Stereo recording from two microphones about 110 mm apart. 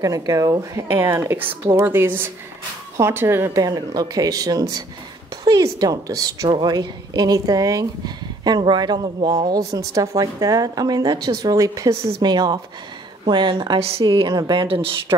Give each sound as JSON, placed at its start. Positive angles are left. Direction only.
{"t": 0.0, "sound": "speech", "side_deg": -30}
{"t": 13.7, "sound": "a woman's voice", "side_deg": -60}
{"t": 14.0, "sound": "speech", "side_deg": -45}